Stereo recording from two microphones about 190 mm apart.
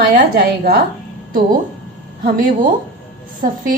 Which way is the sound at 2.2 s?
45° right (ahead or behind).